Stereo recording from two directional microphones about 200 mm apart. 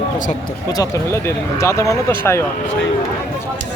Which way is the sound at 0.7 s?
15° left (ahead or behind).